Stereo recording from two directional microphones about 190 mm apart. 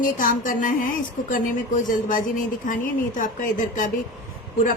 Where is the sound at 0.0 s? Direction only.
45° left (ahead or behind).